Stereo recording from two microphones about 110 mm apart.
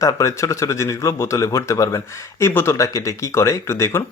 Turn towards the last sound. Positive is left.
turn(degrees=25)  # may be behind; listen again after turning